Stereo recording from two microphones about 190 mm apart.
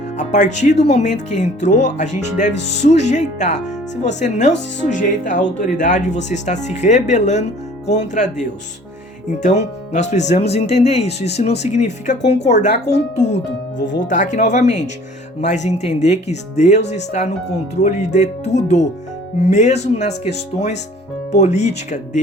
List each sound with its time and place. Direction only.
0.2 s speech: 40° left (ahead or behind)
14.1 s speech: 40° left (ahead or behind)